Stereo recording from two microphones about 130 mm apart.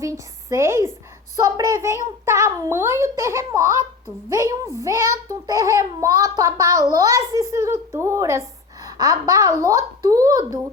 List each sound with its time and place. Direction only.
0.0 s a child's voice: 20° right (ahead or behind)